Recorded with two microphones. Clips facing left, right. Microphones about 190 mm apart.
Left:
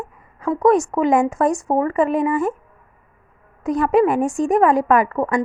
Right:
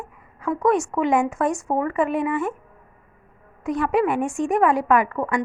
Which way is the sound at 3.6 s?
40° left (ahead or behind).